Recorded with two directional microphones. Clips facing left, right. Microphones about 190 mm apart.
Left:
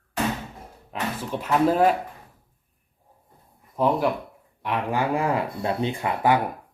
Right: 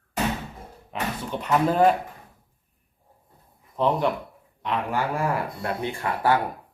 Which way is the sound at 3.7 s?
10° left (ahead or behind).